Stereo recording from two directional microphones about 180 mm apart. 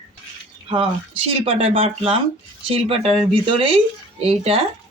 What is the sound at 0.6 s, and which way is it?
Speech, 30° right (ahead or behind).